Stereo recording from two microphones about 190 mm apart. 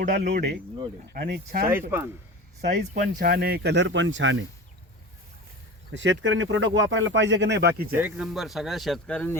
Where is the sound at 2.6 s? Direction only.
50° right (ahead or behind); by 4.4 s 75° right (ahead or behind).